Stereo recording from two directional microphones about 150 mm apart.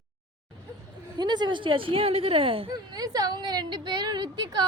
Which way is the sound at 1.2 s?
30° right (ahead or behind).